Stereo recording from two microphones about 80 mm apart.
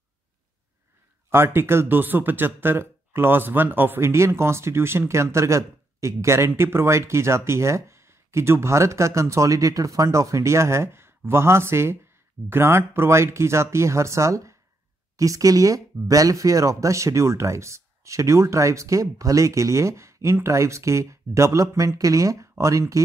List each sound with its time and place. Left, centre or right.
1.3 s speech: right